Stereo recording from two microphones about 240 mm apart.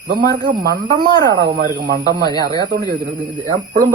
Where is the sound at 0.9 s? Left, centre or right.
Centre.